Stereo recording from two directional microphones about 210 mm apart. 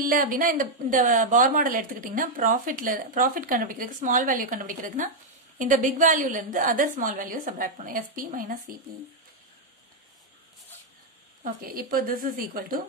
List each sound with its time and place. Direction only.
0.0 s a woman's voice: 40° right (ahead or behind)
11.4 s speech: 40° right (ahead or behind)